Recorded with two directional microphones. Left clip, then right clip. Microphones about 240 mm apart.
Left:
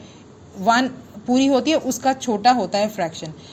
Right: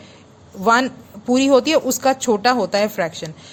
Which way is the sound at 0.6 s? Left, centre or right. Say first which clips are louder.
Right 2 dB; right.